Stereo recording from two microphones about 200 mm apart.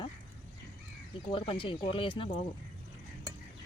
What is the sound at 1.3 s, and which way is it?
Speech, 25° left (ahead or behind).